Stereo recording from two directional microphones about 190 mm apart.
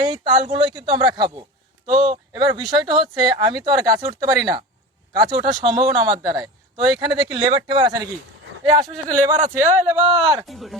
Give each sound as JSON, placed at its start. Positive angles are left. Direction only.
{"t": 0.1, "sound": "a man's voice", "side_deg": -25}
{"t": 10.3, "sound": "speech", "side_deg": 0}